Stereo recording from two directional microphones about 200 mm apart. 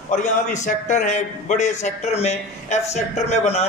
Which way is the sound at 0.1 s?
35° left (ahead or behind).